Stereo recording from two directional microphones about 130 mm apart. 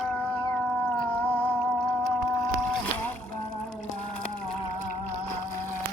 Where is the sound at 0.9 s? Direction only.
40° left (ahead or behind).